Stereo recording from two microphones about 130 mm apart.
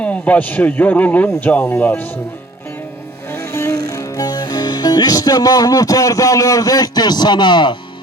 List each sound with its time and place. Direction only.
0.0 s speech: 10° left (ahead or behind)
3.3 s speech: 20° left (ahead or behind)